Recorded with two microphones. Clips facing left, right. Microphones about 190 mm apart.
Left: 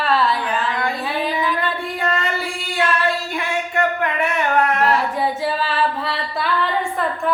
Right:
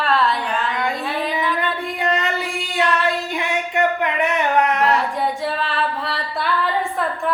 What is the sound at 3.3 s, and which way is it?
Music, 20° right (ahead or behind).